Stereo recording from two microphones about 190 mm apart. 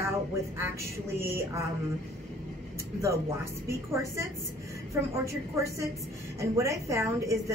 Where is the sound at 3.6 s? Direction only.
15° right (ahead or behind).